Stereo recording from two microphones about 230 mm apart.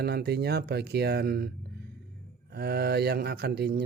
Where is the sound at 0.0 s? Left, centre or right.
Right.